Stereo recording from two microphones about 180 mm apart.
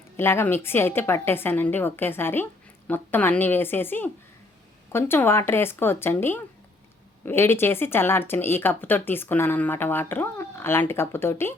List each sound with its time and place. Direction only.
0.2 s speech: 15° left (ahead or behind)